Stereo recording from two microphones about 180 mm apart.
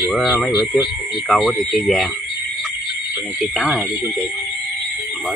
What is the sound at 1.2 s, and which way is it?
Speech, centre (ahead or behind).